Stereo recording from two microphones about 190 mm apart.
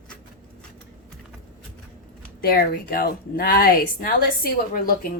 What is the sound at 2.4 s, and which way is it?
A woman's voice, 55° left (ahead or behind).